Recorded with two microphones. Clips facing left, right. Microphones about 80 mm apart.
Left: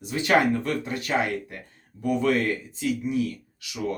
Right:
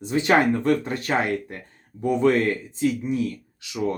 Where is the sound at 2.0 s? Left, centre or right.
Right.